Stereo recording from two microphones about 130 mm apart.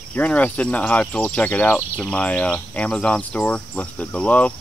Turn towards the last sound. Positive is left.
turn(degrees=10)  # may be behind; listen again after turning